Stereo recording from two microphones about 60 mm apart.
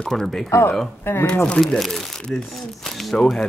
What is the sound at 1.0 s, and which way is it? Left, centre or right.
Speech, left.